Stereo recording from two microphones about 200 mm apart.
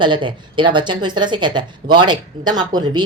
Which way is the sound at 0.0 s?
25° right (ahead or behind).